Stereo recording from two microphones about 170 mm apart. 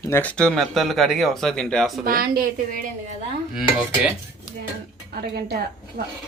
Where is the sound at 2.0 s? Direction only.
60° right (ahead or behind).